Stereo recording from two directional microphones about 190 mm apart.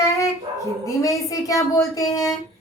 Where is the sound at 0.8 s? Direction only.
15° left (ahead or behind).